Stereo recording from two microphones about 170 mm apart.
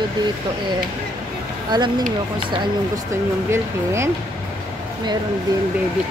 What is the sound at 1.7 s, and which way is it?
Speech, 25° right (ahead or behind).